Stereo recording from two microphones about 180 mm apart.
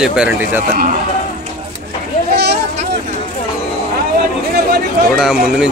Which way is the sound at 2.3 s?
65° right (ahead or behind).